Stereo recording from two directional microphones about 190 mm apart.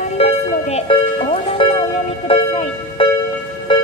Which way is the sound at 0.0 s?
35° left (ahead or behind).